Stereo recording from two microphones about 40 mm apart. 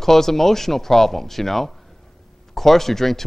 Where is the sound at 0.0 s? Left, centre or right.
Centre.